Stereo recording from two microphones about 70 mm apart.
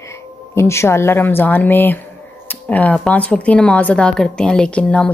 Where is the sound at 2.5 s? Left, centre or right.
Left.